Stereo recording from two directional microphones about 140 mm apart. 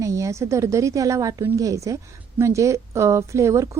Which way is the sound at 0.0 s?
20° right (ahead or behind).